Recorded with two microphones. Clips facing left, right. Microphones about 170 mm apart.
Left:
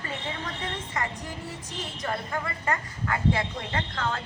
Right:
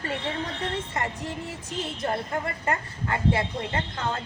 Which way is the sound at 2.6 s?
25° right (ahead or behind).